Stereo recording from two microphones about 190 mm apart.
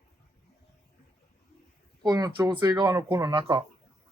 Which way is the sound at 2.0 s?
20° right (ahead or behind).